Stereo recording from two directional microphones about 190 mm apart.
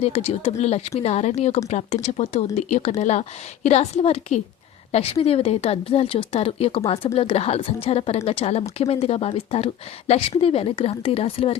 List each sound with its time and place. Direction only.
0.0 s speech: 30° left (ahead or behind)